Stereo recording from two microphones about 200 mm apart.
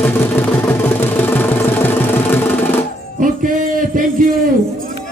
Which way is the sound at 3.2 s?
40° right (ahead or behind).